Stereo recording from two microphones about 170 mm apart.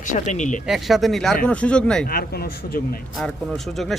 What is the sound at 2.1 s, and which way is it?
Speech, 65° left (ahead or behind).